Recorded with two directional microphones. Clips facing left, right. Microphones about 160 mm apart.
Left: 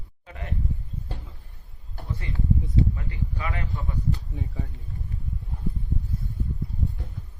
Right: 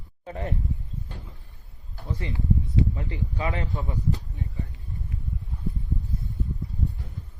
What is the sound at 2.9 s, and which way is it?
Speech, 20° right (ahead or behind).